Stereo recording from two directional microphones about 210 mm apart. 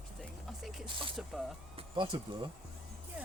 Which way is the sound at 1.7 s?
25° right (ahead or behind).